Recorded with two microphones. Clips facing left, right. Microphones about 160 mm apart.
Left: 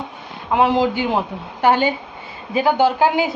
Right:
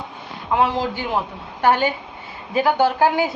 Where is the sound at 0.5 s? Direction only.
15° left (ahead or behind).